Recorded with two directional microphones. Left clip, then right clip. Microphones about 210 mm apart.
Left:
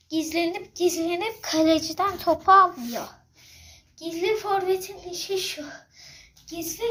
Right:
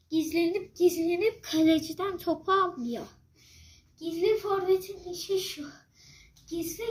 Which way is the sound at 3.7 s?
5° right (ahead or behind).